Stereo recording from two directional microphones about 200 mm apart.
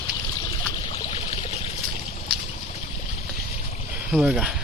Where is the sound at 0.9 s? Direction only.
30° left (ahead or behind).